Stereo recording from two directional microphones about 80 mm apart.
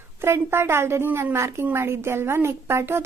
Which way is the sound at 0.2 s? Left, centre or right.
Right.